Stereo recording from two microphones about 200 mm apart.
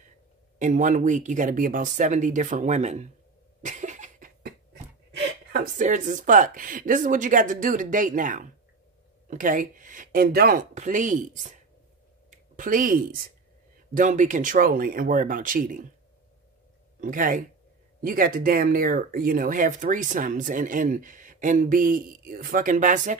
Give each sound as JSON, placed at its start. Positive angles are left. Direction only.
{"t": 0.6, "sound": "speech", "side_deg": -40}
{"t": 3.6, "sound": "cough", "side_deg": -35}
{"t": 5.1, "sound": "speech", "side_deg": -50}
{"t": 10.7, "sound": "speech", "side_deg": -40}
{"t": 17.0, "sound": "speech", "side_deg": -45}